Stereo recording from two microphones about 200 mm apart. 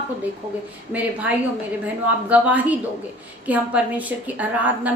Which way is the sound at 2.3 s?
5° right (ahead or behind).